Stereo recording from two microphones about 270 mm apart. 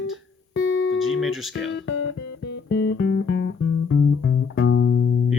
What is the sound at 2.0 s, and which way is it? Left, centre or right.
Music, left.